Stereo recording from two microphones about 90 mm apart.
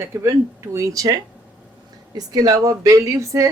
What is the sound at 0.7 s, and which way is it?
Speech, 35° right (ahead or behind).